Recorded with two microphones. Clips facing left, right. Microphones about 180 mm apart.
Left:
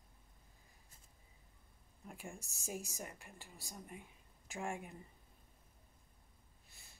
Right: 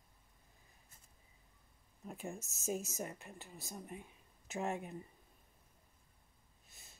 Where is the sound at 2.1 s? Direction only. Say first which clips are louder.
Right 5 dB; 20° right (ahead or behind).